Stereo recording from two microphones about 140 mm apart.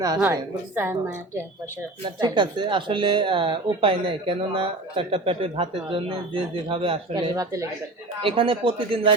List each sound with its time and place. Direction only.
0.2 s a woman's voice: 15° right (ahead or behind)
2.0 s speech: 35° right (ahead or behind)
8.2 s speech: 40° right (ahead or behind)